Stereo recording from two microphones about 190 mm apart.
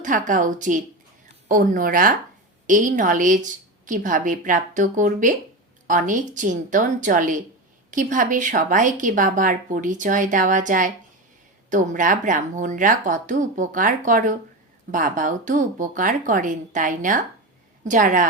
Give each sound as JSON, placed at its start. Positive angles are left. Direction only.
{"t": 0.0, "sound": "speech", "side_deg": -45}